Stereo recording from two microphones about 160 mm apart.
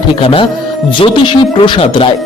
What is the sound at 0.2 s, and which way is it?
A man's voice, 35° left (ahead or behind).